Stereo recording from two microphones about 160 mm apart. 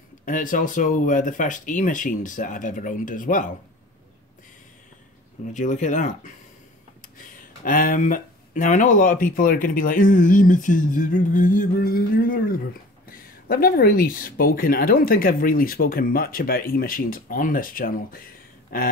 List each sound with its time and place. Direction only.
0.2 s speech: 55° left (ahead or behind)
5.5 s speech: 50° left (ahead or behind)